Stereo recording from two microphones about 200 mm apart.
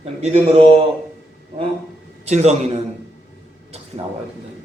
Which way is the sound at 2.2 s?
35° right (ahead or behind).